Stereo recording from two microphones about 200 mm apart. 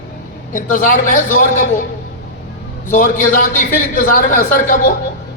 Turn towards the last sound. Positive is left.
turn(degrees=40)  # may be behind; listen again after turning